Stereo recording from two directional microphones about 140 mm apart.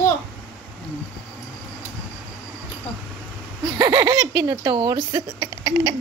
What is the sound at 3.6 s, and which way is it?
Speech, 30° right (ahead or behind).